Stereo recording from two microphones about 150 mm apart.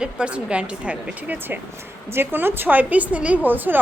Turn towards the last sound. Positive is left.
turn(degrees=-10)  # may be behind; listen again after turning